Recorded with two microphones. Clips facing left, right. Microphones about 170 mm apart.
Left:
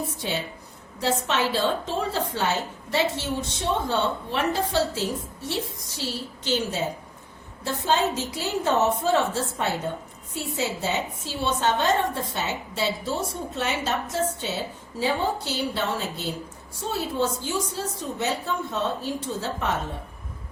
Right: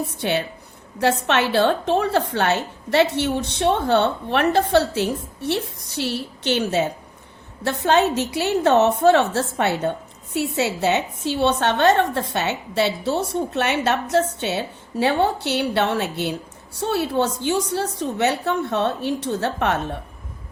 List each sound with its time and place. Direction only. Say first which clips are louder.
0.2 s a woman's voice: right 7 dB; 65° right (ahead or behind)